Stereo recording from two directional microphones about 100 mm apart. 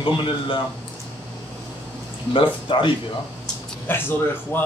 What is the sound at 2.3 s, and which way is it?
Speech, 60° left (ahead or behind).